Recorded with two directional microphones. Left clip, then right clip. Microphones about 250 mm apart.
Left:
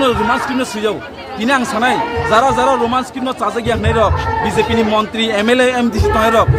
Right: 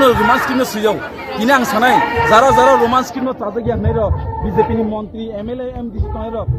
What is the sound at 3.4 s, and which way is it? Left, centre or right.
Speech, left.